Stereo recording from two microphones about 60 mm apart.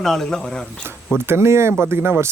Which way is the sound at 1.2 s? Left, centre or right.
Right.